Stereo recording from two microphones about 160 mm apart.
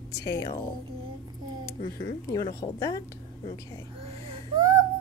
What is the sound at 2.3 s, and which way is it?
Speech, 20° left (ahead or behind).